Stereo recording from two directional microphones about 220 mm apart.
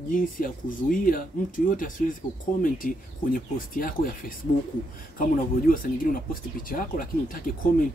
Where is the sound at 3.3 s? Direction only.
40° left (ahead or behind).